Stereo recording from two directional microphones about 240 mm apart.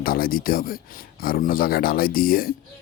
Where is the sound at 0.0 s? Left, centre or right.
Left.